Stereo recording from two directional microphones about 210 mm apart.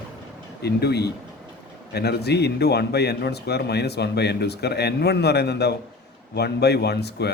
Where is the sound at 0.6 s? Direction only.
50° left (ahead or behind).